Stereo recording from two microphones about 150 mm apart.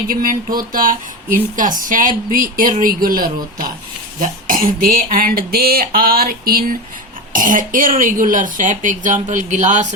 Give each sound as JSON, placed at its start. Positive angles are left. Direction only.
{"t": 0.1, "sound": "speech", "side_deg": -70}
{"t": 5.0, "sound": "a sound", "side_deg": -70}
{"t": 7.3, "sound": "speech", "side_deg": -60}